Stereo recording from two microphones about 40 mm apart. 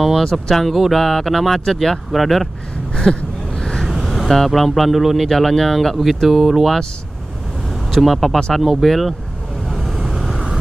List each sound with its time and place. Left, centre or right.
0.2 s speech: centre
3.2 s gasp: left
3.8 s speech: centre
7.9 s speech: centre
9.7 s vehicle: centre